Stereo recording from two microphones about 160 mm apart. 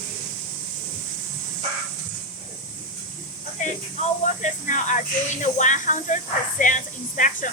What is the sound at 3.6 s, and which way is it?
Speech, 50° left (ahead or behind).